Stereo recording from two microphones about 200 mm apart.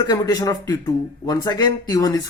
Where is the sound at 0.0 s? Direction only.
20° left (ahead or behind).